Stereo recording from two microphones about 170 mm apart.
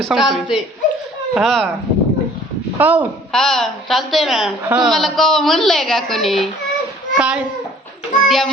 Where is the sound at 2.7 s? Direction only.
10° right (ahead or behind).